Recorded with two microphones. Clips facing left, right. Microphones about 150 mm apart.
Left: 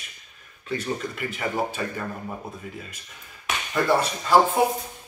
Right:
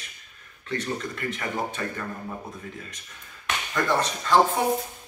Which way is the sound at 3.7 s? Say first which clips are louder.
Left 3 dB; 10° left (ahead or behind).